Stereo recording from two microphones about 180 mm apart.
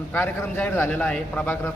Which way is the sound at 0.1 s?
10° left (ahead or behind).